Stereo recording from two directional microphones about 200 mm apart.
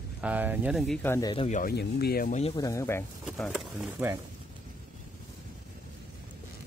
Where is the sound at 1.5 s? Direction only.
45° left (ahead or behind).